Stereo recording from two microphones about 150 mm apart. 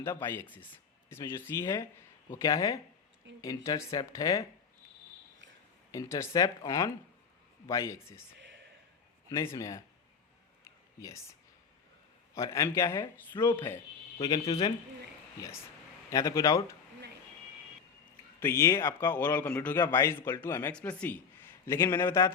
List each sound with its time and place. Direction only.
0.0 s speech: 15° left (ahead or behind)
5.9 s speech: 20° left (ahead or behind)
9.3 s speech: 20° left (ahead or behind)
10.6 s a sound: 20° left (ahead or behind)
12.3 s speech: 20° left (ahead or behind)
14.2 s speech: 30° left (ahead or behind)
16.0 s speech: 20° left (ahead or behind)
18.3 s a man's voice: 15° left (ahead or behind)